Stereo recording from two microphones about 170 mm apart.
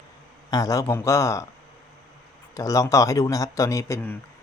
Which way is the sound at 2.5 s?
20° left (ahead or behind).